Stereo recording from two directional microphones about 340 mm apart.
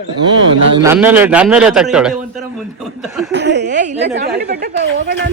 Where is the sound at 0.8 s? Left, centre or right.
Centre.